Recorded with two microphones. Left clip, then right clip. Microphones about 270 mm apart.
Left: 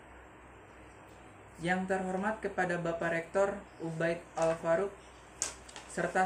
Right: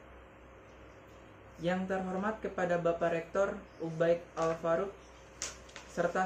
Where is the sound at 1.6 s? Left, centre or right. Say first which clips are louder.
Left 2 dB; centre.